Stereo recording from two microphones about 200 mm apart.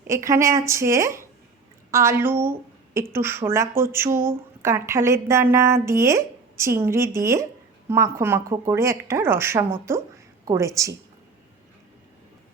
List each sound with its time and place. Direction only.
0.1 s a woman's voice: 15° right (ahead or behind)